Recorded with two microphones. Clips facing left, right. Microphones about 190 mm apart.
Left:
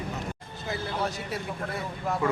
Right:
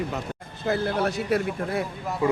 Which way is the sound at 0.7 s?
60° right (ahead or behind).